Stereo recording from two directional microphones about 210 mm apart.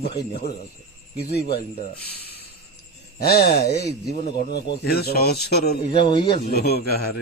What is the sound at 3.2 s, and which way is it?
A man's voice, 50° left (ahead or behind).